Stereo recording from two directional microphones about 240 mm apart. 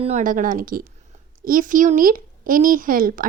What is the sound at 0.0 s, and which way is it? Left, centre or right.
Speech, right.